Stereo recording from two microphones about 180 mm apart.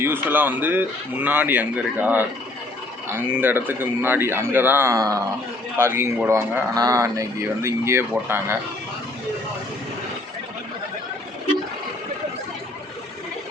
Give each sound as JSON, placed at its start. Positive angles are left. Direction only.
{"t": 0.0, "sound": "speech", "side_deg": -10}